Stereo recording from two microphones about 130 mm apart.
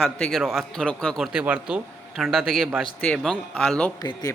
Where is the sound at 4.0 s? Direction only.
30° left (ahead or behind).